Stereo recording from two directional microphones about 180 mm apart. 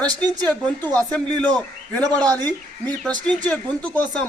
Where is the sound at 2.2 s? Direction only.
20° right (ahead or behind).